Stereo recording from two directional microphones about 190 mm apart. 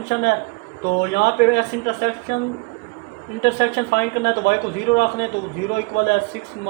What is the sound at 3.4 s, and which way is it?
A man's voice, 60° left (ahead or behind).